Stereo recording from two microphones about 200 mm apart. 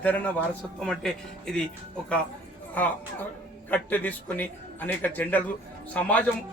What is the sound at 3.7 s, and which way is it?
A man's voice, 10° left (ahead or behind).